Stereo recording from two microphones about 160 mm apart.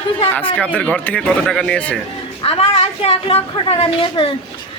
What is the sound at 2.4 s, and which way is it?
Speech, 35° left (ahead or behind).